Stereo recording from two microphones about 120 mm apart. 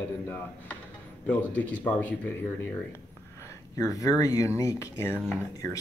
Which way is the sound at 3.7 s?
30° left (ahead or behind).